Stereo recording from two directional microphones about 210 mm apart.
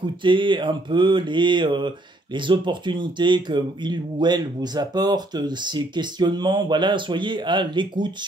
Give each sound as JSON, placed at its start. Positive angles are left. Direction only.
{"t": 0.2, "sound": "speech", "side_deg": -20}